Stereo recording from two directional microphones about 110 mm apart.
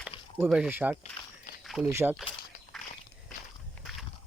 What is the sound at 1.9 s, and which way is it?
Speech, 25° right (ahead or behind).